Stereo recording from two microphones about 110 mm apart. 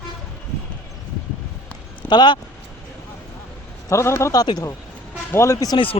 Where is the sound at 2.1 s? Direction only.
40° left (ahead or behind).